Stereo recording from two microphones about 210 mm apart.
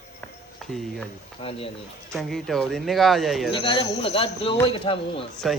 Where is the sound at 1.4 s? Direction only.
25° left (ahead or behind).